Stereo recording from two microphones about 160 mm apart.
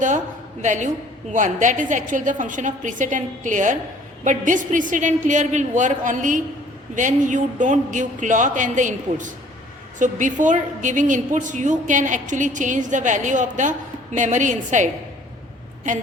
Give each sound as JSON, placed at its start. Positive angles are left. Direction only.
{"t": 0.6, "sound": "a woman's voice", "side_deg": -50}